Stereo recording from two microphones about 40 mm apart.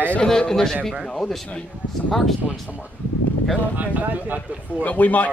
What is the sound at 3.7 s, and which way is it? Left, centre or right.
Speech, right.